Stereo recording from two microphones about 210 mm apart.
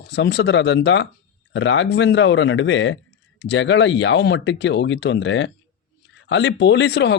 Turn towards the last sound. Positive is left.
turn(degrees=55)  # may be behind; listen again after turning